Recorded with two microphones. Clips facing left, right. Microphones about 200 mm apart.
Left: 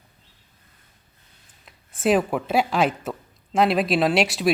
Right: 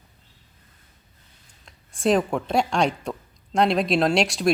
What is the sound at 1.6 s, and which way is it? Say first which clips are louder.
Speech: even; 5° left (ahead or behind).